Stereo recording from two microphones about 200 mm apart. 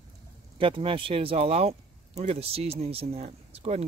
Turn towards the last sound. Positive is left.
turn(degrees=-30)  # may be behind; listen again after turning